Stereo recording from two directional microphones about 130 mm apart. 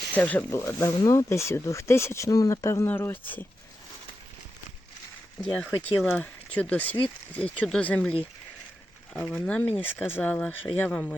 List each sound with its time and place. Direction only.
0.1 s speech: 10° left (ahead or behind)
5.4 s speech: 5° left (ahead or behind)
9.1 s speech: 5° left (ahead or behind)